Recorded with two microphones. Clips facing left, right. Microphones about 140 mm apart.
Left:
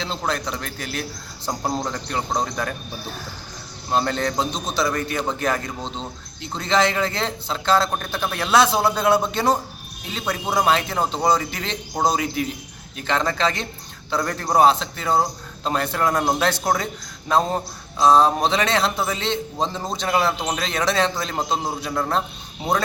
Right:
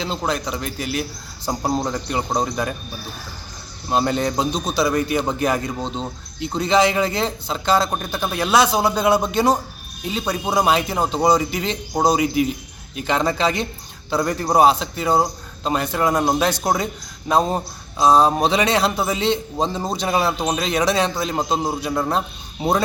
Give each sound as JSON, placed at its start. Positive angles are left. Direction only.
{"t": 0.3, "sound": "speech", "side_deg": -5}
{"t": 3.8, "sound": "speech", "side_deg": -10}
{"t": 4.9, "sound": "speech", "side_deg": -15}